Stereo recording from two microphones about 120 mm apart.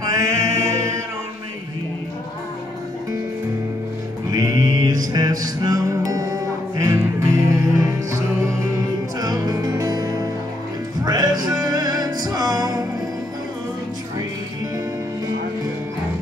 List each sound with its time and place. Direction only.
0.2 s a capella: 25° right (ahead or behind)
4.3 s music: 30° right (ahead or behind)